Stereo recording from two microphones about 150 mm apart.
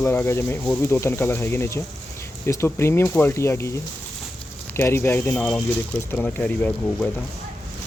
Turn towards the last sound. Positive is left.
turn(degrees=10)  # may be behind; listen again after turning